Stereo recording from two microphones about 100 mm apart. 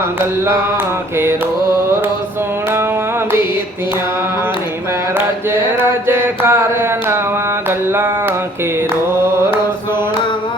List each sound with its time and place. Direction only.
6.1 s mantra: 20° right (ahead or behind)